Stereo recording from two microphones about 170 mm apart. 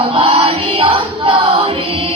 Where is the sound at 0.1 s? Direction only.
35° right (ahead or behind).